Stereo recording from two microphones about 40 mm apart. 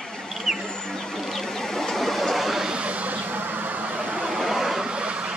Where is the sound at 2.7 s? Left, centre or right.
Right.